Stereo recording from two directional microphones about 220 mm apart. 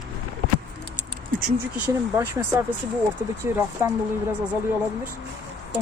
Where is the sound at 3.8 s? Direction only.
10° right (ahead or behind).